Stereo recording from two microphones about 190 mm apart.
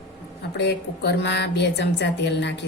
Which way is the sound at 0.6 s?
60° left (ahead or behind).